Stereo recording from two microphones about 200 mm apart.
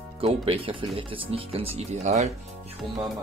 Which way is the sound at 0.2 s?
30° right (ahead or behind).